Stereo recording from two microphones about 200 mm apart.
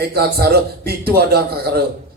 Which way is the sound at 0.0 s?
50° right (ahead or behind).